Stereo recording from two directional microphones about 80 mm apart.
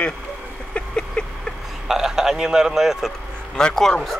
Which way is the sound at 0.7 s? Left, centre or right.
Centre.